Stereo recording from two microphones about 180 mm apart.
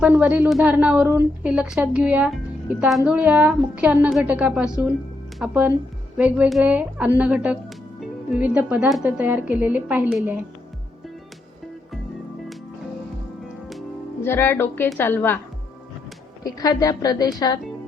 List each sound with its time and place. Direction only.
0.0 s a woman's voice: 10° right (ahead or behind)
14.3 s music: 10° left (ahead or behind)
16.4 s a woman's voice: 20° left (ahead or behind)